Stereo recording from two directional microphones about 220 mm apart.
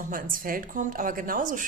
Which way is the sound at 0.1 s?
40° right (ahead or behind).